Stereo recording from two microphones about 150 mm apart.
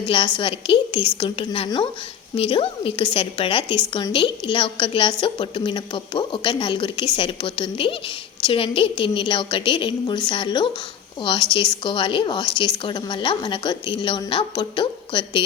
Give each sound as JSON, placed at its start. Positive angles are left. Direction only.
{"t": 0.0, "sound": "a woman's voice", "side_deg": 35}